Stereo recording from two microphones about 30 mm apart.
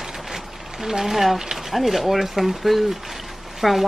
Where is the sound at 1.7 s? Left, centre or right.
Centre.